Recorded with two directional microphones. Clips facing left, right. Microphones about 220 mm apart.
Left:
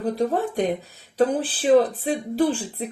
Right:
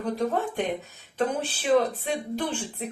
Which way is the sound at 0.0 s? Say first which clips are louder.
Left 4 dB; 35° left (ahead or behind).